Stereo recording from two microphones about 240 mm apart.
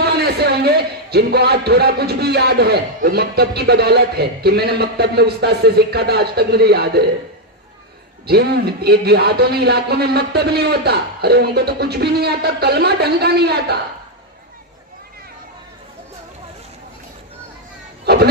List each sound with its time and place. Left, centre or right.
0.0 s speech: right
8.3 s a man's voice: right
18.0 s music: right